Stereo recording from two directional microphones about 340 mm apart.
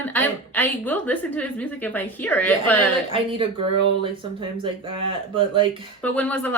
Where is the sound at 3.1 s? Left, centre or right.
Centre.